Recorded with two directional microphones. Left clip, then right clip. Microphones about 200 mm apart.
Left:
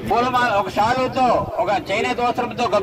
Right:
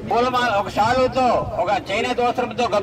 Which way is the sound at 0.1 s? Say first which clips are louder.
Left 1 dB; 40° right (ahead or behind).